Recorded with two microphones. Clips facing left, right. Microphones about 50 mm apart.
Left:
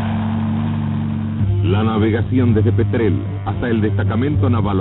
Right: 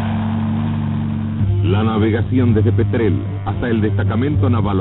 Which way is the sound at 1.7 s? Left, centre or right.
Left.